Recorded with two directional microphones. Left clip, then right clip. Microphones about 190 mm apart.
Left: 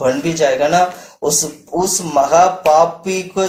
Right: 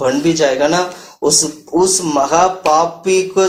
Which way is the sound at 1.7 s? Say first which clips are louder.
Right 2 dB; 20° right (ahead or behind).